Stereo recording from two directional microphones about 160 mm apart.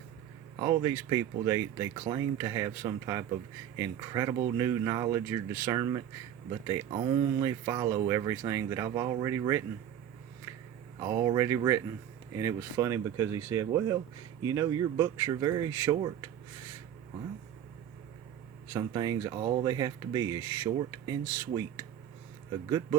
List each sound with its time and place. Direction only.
0.6 s speech: 25° right (ahead or behind)
11.0 s speech: 25° right (ahead or behind)
18.7 s speech: 25° right (ahead or behind)